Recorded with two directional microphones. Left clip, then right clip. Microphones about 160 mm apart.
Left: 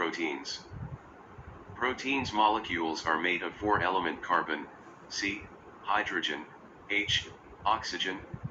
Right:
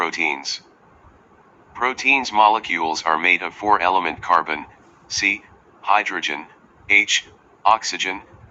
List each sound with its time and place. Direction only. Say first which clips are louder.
0.0 s speech: right 11 dB; 45° right (ahead or behind)
1.8 s speech: right 13 dB; 45° right (ahead or behind)